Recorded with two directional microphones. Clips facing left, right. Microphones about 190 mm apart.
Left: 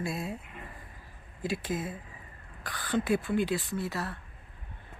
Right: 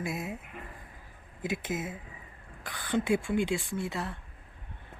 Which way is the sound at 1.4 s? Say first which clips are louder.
Left 1 dB; 20° right (ahead or behind).